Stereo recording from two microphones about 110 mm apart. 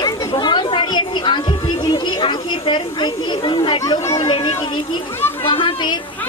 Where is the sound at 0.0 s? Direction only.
30° left (ahead or behind).